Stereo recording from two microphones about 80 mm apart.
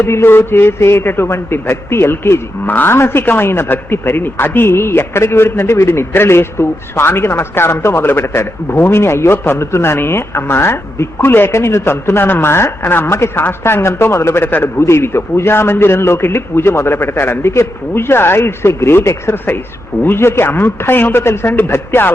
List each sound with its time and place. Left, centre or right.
0.0 s a man's voice: left